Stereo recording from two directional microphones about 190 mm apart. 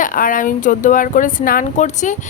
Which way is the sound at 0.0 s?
45° left (ahead or behind).